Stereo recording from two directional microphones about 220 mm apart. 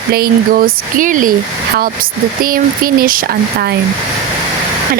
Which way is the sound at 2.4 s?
40° right (ahead or behind).